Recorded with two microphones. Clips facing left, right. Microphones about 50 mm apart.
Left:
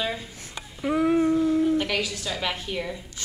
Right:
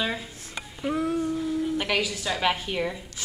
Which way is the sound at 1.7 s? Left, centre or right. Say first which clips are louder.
Even; centre.